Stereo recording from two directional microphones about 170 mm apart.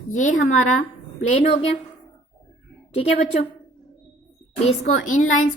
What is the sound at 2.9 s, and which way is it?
Speech, 35° left (ahead or behind).